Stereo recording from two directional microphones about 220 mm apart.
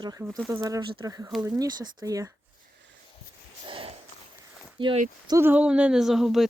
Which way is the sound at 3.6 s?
25° right (ahead or behind).